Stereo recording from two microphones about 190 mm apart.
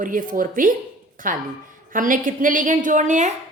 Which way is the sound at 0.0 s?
45° right (ahead or behind).